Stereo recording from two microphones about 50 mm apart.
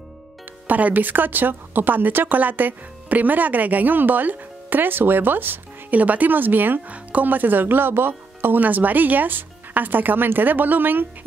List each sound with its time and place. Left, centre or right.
0.7 s a woman's voice: right
6.9 s a woman's voice: right